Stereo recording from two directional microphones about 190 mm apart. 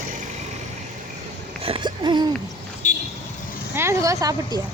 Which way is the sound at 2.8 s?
40° left (ahead or behind).